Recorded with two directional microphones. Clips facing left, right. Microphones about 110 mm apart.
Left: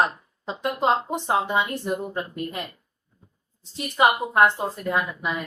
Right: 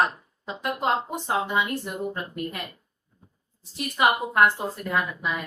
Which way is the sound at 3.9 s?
25° left (ahead or behind).